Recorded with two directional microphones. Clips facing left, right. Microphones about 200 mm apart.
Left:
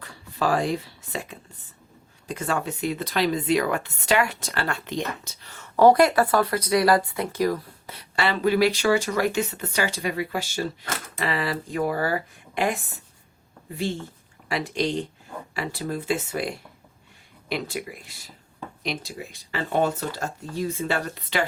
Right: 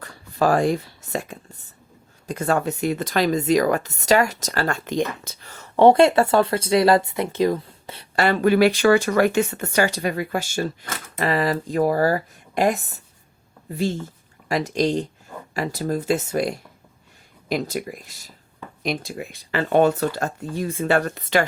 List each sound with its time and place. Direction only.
0.0 s speech: 45° right (ahead or behind)
5.7 s speech: 25° right (ahead or behind)
8.1 s speech: 45° right (ahead or behind)
14.4 s speech: 40° right (ahead or behind)